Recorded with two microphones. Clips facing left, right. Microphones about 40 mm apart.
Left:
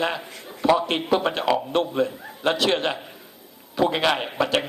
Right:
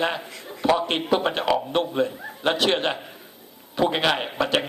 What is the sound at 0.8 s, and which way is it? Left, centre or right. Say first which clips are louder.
Speech: even; right.